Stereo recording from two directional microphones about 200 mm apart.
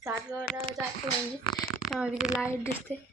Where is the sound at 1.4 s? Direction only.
25° left (ahead or behind).